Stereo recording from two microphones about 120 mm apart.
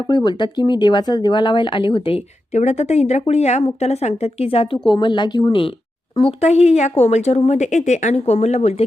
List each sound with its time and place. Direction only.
0.1 s speech: 35° left (ahead or behind)
2.5 s speech: 70° left (ahead or behind); by 4.8 s 50° left (ahead or behind)
4.9 s speech: 40° left (ahead or behind)
6.1 s a woman's voice: 55° left (ahead or behind); by 8.1 s 80° left
8.1 s speech: 60° left (ahead or behind)